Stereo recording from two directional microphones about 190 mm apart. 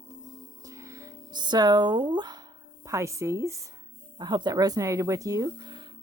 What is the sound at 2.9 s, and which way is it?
Speech, 15° right (ahead or behind).